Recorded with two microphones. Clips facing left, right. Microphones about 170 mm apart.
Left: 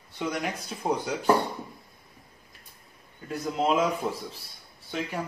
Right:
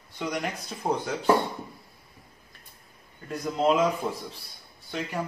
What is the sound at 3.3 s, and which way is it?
Speech, 5° left (ahead or behind).